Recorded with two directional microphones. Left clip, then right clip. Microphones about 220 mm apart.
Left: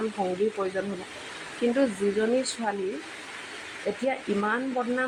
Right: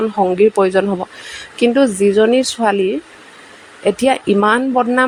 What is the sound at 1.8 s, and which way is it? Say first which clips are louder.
Speech: right 14 dB; 45° right (ahead or behind).